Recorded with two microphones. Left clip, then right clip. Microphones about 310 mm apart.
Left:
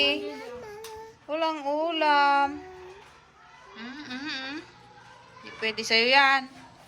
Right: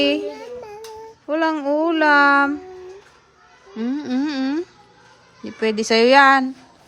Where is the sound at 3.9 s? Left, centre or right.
Right.